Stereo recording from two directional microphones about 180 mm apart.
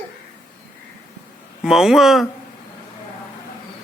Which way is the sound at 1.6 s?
Centre (ahead or behind).